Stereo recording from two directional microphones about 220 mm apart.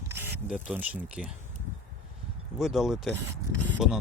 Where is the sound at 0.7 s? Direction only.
5° right (ahead or behind).